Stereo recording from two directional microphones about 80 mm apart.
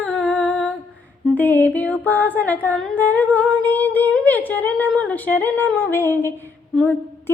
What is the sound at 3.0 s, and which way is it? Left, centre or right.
Humming, left.